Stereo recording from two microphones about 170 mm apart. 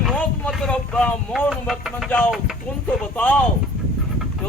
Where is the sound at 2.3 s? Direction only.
Centre (ahead or behind).